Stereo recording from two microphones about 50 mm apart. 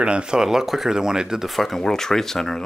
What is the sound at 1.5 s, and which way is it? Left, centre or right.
Speech, centre.